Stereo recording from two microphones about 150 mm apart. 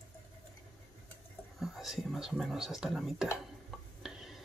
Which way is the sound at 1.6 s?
Centre (ahead or behind).